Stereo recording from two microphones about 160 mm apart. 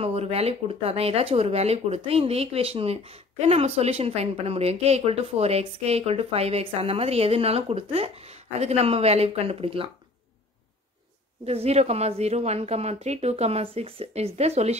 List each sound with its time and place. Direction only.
0.0 s speech: 40° right (ahead or behind)
11.4 s speech: 40° right (ahead or behind)